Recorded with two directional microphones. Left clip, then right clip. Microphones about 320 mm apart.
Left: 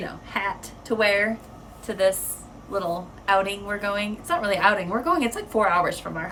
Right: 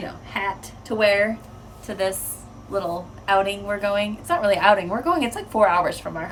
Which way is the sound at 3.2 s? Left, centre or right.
Centre.